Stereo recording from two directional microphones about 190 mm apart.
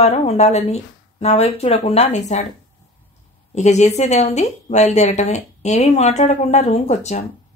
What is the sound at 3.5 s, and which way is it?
A woman's voice, 35° left (ahead or behind).